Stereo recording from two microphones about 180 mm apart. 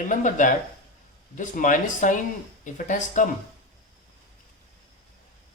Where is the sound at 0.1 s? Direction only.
45° left (ahead or behind).